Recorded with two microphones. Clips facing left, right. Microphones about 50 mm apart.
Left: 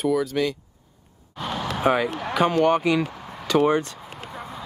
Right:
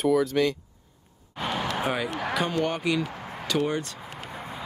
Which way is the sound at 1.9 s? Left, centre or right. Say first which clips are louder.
Left 6 dB; centre.